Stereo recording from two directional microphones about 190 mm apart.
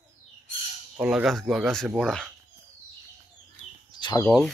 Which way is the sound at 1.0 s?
5° right (ahead or behind).